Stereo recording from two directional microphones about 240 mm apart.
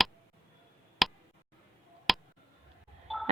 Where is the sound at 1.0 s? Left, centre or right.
Centre.